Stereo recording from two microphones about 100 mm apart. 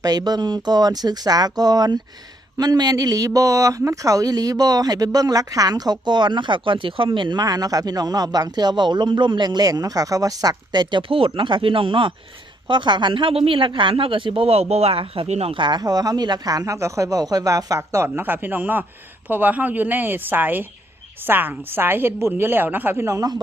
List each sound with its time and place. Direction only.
0.0 s speech: 40° right (ahead or behind)
11.1 s speech: 60° right (ahead or behind); by 15.5 s 85° right
15.5 s a woman's voice: 50° right (ahead or behind)